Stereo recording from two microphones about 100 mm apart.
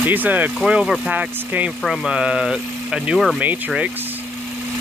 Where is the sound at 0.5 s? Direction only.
5° right (ahead or behind).